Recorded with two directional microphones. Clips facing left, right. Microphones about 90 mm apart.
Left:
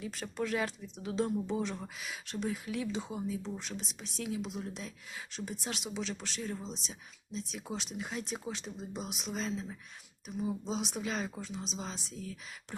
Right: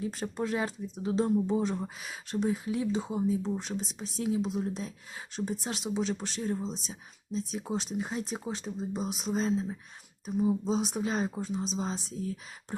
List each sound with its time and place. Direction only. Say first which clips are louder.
0.0 s speech: right 4 dB; 30° right (ahead or behind)